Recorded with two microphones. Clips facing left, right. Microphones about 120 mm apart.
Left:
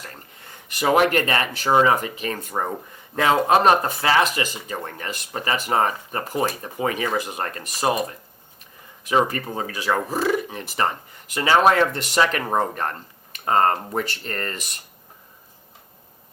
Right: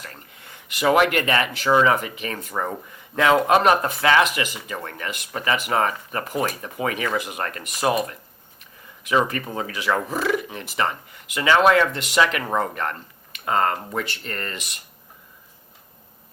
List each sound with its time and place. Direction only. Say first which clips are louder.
0.7 s speech: even; 35° left (ahead or behind)